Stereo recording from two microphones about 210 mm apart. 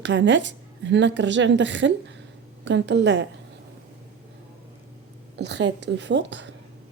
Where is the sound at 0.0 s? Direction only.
60° right (ahead or behind).